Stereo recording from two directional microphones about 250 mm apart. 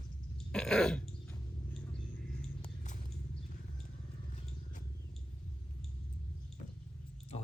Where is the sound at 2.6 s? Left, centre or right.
Left.